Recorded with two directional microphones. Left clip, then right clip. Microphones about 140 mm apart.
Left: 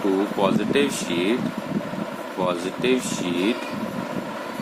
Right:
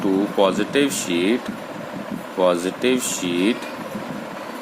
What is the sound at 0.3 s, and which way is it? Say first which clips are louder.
Speech: right 5 dB; 75° right (ahead or behind).